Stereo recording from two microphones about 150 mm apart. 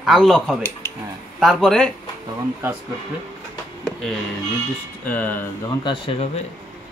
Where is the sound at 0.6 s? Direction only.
20° left (ahead or behind).